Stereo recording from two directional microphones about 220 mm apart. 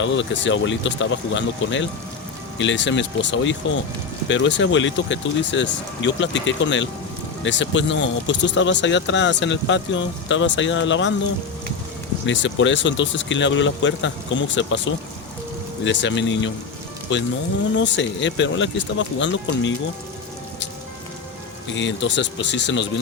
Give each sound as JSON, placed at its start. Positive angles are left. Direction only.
{"t": 0.0, "sound": "speech", "side_deg": 55}
{"t": 12.2, "sound": "speech", "side_deg": 55}
{"t": 21.8, "sound": "speech", "side_deg": 55}